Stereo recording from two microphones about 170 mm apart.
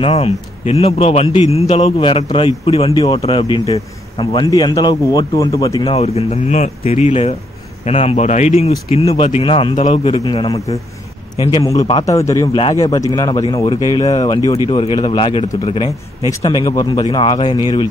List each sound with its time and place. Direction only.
0.0 s a man's voice: 35° left (ahead or behind); by 5.9 s 20° left (ahead or behind)
5.9 s a man's voice: 40° left (ahead or behind)
11.6 s a man's voice: 20° left (ahead or behind)